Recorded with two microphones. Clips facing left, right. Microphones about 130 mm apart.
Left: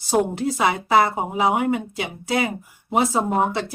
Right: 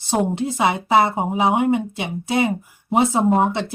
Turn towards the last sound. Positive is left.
turn(degrees=-20)  # may be behind; listen again after turning